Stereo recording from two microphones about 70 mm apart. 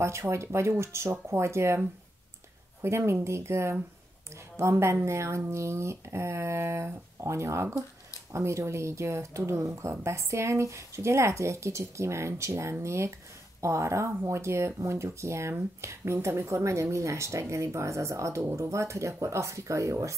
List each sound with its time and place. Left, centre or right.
0.0 s speech: right
2.8 s speech: right